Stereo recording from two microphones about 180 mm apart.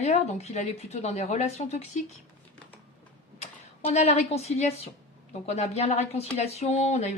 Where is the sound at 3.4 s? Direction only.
40° left (ahead or behind).